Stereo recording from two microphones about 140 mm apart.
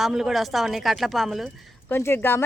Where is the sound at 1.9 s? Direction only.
15° left (ahead or behind).